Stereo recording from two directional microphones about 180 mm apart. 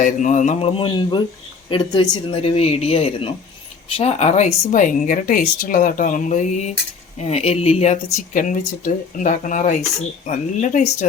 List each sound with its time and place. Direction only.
0.0 s speech: 45° left (ahead or behind)